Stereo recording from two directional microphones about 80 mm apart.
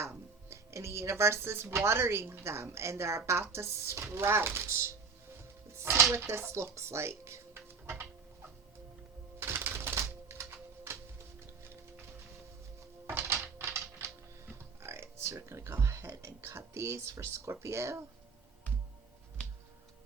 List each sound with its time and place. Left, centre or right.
0.5 s speech: right
9.4 s music: right
13.1 s music: right
16.2 s speech: right
19.4 s music: centre